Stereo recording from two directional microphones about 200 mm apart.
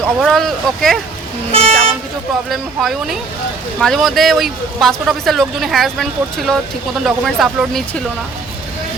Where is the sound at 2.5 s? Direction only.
Centre (ahead or behind).